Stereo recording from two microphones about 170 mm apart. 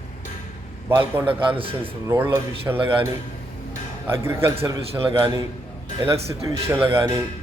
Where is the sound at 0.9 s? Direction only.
10° right (ahead or behind).